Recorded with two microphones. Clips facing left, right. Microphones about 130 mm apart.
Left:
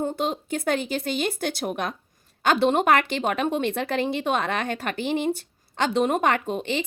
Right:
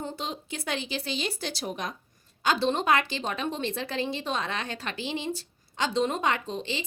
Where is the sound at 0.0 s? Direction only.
50° left (ahead or behind).